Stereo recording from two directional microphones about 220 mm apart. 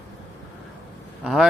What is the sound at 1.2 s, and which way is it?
Speech, centre (ahead or behind).